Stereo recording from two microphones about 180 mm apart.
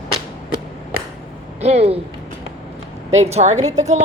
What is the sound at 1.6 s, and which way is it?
Speech, 35° right (ahead or behind).